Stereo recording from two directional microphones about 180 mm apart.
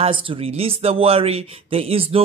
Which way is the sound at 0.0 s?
30° right (ahead or behind).